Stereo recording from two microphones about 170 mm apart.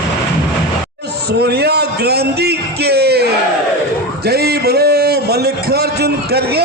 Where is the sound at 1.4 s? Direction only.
70° right (ahead or behind).